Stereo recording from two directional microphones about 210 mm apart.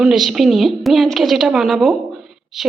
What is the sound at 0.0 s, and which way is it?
A woman's voice, centre (ahead or behind).